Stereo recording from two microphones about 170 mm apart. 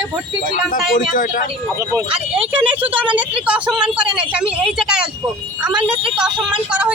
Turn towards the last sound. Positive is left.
turn(degrees=-5)  # may be behind; listen again after turning